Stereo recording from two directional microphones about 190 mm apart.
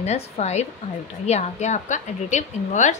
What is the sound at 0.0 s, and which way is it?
A woman's voice, 35° left (ahead or behind).